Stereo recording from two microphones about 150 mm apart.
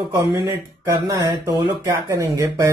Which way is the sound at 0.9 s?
30° right (ahead or behind).